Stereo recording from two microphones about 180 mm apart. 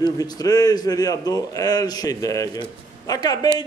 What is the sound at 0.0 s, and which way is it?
Speech, 20° left (ahead or behind).